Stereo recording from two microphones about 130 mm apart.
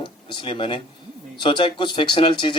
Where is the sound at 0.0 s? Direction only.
40° left (ahead or behind).